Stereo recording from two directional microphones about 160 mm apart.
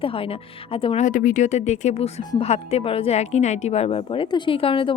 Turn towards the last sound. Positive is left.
turn(degrees=35)  # may be behind; listen again after turning